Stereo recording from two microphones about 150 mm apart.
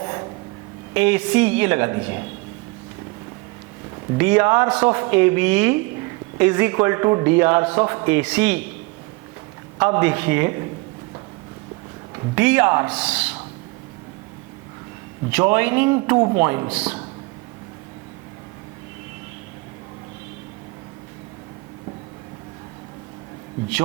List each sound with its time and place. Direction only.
0.0 s a sound: 20° right (ahead or behind)
0.9 s speech: 10° right (ahead or behind)
4.2 s speech: 10° right (ahead or behind)
9.8 s speech: 15° right (ahead or behind)
12.3 s speech: 10° right (ahead or behind)
15.3 s speech: 10° right (ahead or behind)